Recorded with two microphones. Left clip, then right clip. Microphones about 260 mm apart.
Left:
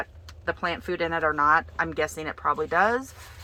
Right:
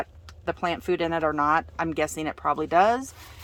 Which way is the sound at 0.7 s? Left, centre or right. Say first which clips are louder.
Right 2 dB; right.